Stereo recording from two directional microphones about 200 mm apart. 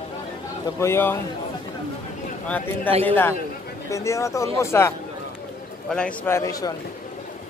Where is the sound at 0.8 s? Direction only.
10° left (ahead or behind).